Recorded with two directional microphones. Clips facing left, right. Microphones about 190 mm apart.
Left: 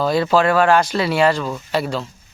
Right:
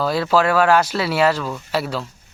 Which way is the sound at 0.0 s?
5° right (ahead or behind).